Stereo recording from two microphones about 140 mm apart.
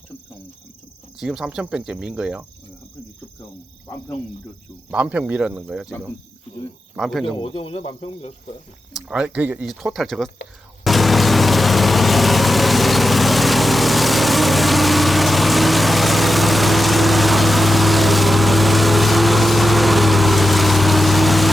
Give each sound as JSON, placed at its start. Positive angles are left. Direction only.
{"t": 1.2, "sound": "speech", "side_deg": -5}
{"t": 4.9, "sound": "speech", "side_deg": -10}
{"t": 6.9, "sound": "speech", "side_deg": 0}
{"t": 7.3, "sound": "speech", "side_deg": 40}
{"t": 8.9, "sound": "speech", "side_deg": -5}
{"t": 9.9, "sound": "speech", "side_deg": 0}
{"t": 10.8, "sound": "vehicle", "side_deg": 0}